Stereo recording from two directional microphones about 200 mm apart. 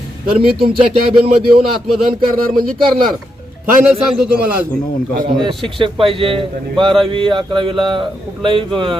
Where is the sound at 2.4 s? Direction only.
45° right (ahead or behind).